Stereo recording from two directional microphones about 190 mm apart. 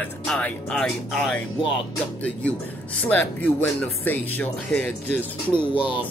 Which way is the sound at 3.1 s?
10° left (ahead or behind).